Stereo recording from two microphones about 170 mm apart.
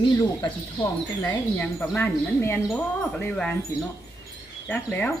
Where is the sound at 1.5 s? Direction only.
5° left (ahead or behind).